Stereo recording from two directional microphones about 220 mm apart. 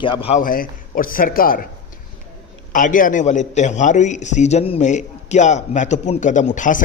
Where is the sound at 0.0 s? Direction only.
25° left (ahead or behind); by 1.7 s 40° left (ahead or behind).